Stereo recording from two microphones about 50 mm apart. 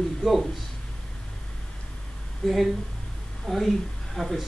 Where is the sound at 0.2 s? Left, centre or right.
Centre.